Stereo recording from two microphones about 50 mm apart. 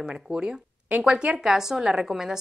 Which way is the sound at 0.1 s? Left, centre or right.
Centre.